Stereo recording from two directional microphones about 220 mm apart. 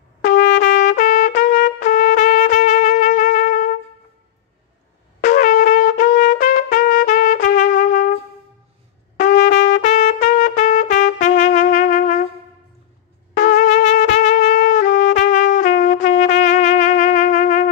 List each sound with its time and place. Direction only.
0.3 s trumpet: 45° left (ahead or behind)
5.2 s trumpet: 35° left (ahead or behind)
9.1 s trumpet: 35° left (ahead or behind)
13.3 s trumpet: 35° left (ahead or behind)